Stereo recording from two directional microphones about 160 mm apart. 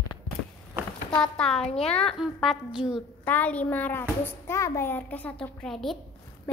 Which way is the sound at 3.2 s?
10° left (ahead or behind).